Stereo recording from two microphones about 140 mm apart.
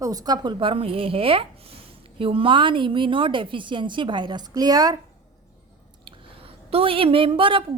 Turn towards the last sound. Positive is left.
turn(degrees=-35)  # may be behind; listen again after turning